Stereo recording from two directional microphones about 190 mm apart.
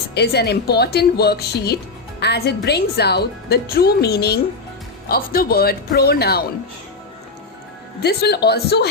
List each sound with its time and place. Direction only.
0.1 s speech: 60° left (ahead or behind)
8.0 s speech: 60° left (ahead or behind)